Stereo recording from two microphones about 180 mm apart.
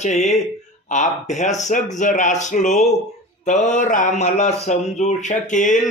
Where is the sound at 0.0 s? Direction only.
40° left (ahead or behind).